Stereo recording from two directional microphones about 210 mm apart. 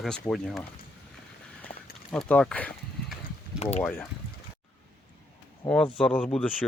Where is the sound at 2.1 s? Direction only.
5° left (ahead or behind).